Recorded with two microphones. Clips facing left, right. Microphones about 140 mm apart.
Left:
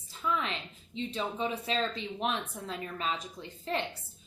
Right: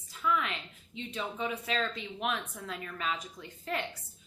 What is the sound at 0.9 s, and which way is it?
A woman's voice, 30° left (ahead or behind).